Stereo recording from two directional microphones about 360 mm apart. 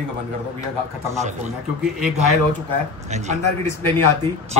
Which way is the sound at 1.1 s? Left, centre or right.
Centre.